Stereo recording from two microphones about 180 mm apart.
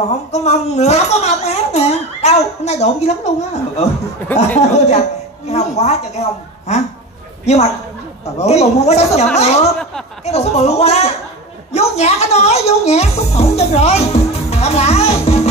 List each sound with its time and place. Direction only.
0.1 s speech: 40° left (ahead or behind)
7.4 s speech: 40° left (ahead or behind)